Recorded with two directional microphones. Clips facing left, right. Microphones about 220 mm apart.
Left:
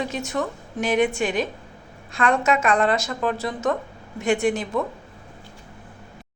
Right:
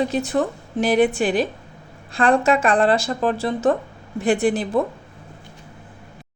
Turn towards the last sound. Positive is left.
turn(degrees=-35)  # may be behind; listen again after turning